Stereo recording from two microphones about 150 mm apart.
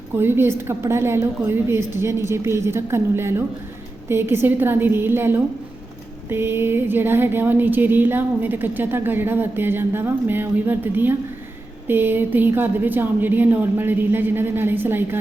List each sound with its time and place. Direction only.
0.2 s speech: 15° right (ahead or behind)